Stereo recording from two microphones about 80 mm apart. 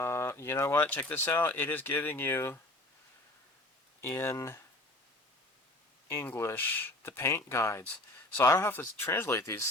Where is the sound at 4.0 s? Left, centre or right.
Left.